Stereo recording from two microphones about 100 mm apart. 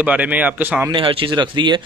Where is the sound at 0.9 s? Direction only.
60° right (ahead or behind).